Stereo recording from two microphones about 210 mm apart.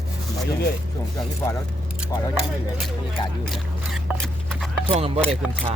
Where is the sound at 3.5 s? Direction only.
Centre (ahead or behind).